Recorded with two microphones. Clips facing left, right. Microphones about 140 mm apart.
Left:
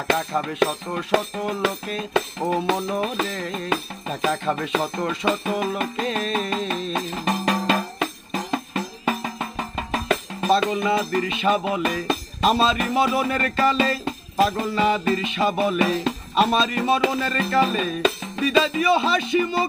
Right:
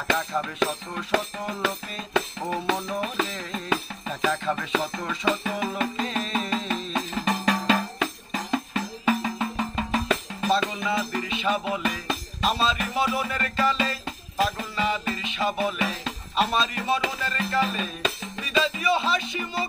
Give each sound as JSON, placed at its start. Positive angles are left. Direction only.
{"t": 0.1, "sound": "music", "side_deg": 55}
{"t": 4.6, "sound": "speech", "side_deg": 45}
{"t": 5.1, "sound": "music", "side_deg": 55}